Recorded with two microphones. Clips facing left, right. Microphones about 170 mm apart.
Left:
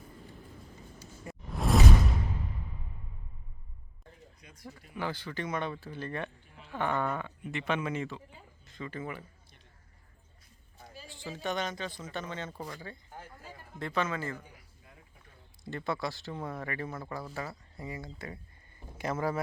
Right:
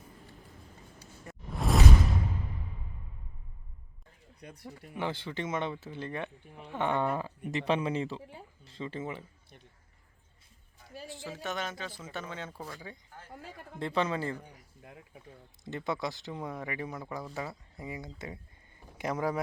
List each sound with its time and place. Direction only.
1.2 s a sound: 5° left (ahead or behind)
4.4 s speech: 60° right (ahead or behind)
4.9 s speech: 25° right (ahead or behind)
11.0 s a sound: centre (ahead or behind)
11.4 s speech: 5° right (ahead or behind)
13.7 s a man's voice: 30° right (ahead or behind)
15.6 s speech: 20° right (ahead or behind)